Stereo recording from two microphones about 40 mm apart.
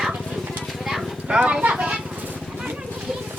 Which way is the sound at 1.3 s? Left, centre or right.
Right.